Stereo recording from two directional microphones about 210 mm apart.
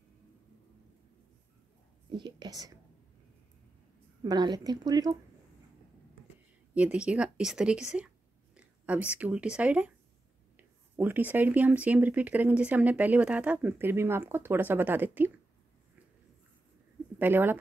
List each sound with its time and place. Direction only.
2.0 s a woman's voice: 20° right (ahead or behind)
4.2 s a woman's voice: 20° right (ahead or behind)
6.7 s speech: 5° right (ahead or behind)
11.0 s speech: 10° right (ahead or behind)
17.2 s speech: 10° right (ahead or behind)